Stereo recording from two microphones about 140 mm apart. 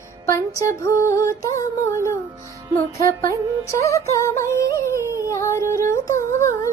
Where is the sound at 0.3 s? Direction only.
20° left (ahead or behind).